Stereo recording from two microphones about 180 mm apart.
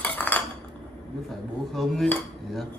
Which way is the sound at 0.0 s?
10° left (ahead or behind).